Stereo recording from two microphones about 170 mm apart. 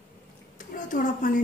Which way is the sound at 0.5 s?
50° left (ahead or behind).